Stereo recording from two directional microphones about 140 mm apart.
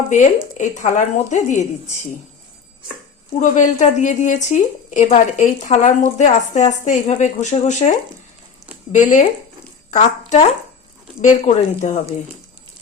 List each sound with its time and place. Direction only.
0.1 s speech: 60° left (ahead or behind)
3.5 s speech: 60° left (ahead or behind)